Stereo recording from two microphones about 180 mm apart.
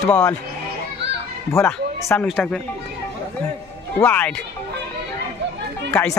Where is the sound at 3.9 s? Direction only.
10° left (ahead or behind).